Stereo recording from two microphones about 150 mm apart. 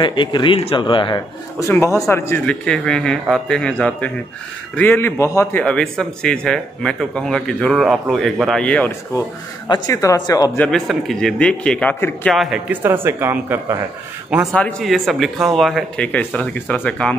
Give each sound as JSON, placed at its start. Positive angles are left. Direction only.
{"t": 0.0, "sound": "speech", "side_deg": 30}
{"t": 1.7, "sound": "speech", "side_deg": 20}
{"t": 5.6, "sound": "speech", "side_deg": 5}
{"t": 9.7, "sound": "speech", "side_deg": 25}
{"t": 10.6, "sound": "speech", "side_deg": 0}
{"t": 12.4, "sound": "speech", "side_deg": -5}
{"t": 14.5, "sound": "speech", "side_deg": 5}